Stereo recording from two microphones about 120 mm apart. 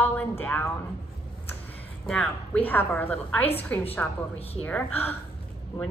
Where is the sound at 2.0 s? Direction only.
10° left (ahead or behind).